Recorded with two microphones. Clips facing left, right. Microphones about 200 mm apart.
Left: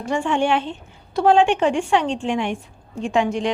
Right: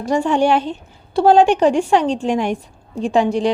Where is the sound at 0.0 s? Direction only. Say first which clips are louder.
Right 5 dB; 40° right (ahead or behind).